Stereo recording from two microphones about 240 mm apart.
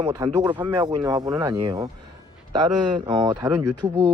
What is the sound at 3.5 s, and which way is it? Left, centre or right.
Speech, centre.